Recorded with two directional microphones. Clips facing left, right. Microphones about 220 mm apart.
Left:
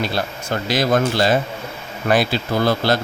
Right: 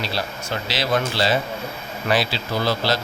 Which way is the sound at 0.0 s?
50° left (ahead or behind).